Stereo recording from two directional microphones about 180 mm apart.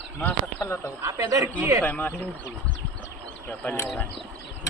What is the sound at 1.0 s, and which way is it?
Speech, 15° right (ahead or behind).